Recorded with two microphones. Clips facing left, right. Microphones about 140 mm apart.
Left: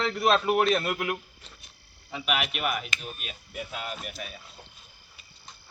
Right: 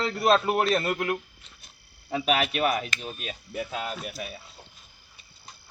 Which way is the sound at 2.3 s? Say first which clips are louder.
Right 4 dB; 35° right (ahead or behind).